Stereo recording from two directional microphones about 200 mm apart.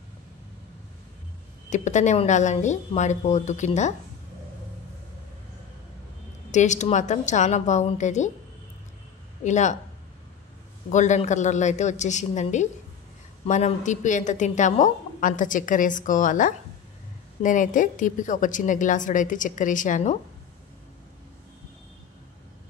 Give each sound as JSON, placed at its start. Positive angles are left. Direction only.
{"t": 1.7, "sound": "a woman's voice", "side_deg": 35}
{"t": 6.5, "sound": "a woman's voice", "side_deg": 35}
{"t": 9.4, "sound": "a woman's voice", "side_deg": 35}
{"t": 10.9, "sound": "a woman's voice", "side_deg": 35}